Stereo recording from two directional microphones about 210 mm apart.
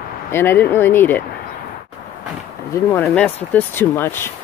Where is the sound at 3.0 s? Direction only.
5° left (ahead or behind).